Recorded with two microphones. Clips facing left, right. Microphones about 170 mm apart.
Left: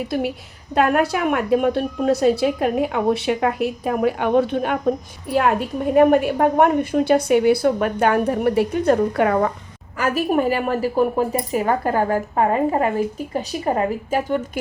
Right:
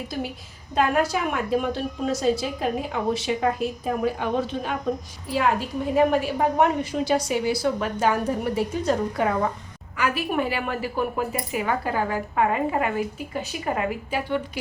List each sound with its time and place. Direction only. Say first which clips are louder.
0.7 s a woman's voice: left 4 dB; 60° left (ahead or behind)
10.0 s speech: left 5 dB; 40° left (ahead or behind)